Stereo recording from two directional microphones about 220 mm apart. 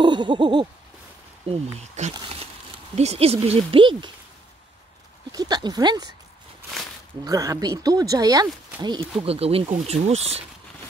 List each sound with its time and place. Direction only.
0.0 s a sound: 20° right (ahead or behind)
1.5 s speech: 30° right (ahead or behind)
5.3 s speech: 15° right (ahead or behind)
7.2 s speech: 15° right (ahead or behind)